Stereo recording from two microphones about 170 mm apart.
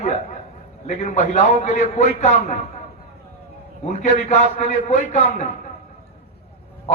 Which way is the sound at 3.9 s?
45° left (ahead or behind).